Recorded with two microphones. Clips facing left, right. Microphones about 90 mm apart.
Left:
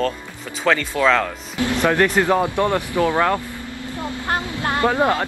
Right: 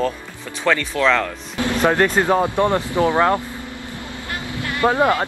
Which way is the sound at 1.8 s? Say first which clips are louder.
Right 1 dB; 20° right (ahead or behind).